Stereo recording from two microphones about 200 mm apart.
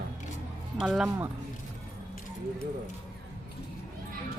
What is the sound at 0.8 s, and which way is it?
Speech, 5° right (ahead or behind).